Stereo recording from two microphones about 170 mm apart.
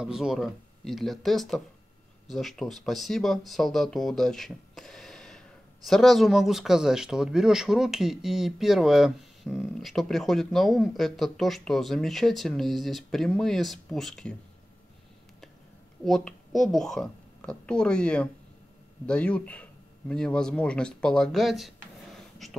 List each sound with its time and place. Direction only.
0.0 s speech: 5° right (ahead or behind)
16.0 s speech: centre (ahead or behind)